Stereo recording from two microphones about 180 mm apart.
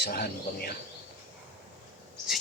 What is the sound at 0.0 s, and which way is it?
Cricket, 55° left (ahead or behind).